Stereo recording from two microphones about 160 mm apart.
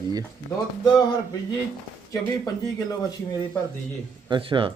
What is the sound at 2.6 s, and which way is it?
Speech, 25° left (ahead or behind).